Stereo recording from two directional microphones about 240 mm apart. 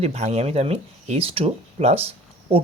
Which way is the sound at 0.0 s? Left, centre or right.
Right.